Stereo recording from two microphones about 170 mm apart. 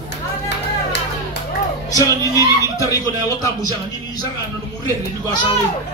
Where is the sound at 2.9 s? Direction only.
20° left (ahead or behind).